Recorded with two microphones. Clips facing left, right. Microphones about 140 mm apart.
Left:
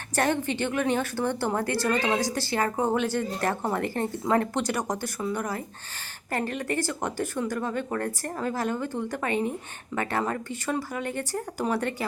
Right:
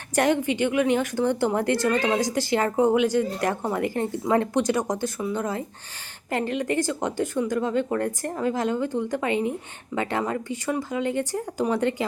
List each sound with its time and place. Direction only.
0.2 s speech: 15° right (ahead or behind)